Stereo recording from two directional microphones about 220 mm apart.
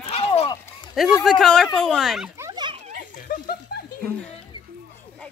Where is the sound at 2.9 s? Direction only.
40° left (ahead or behind).